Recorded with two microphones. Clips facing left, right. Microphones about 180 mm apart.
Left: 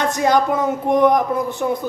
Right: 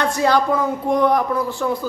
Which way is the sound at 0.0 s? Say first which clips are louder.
Left 1 dB; 20° left (ahead or behind).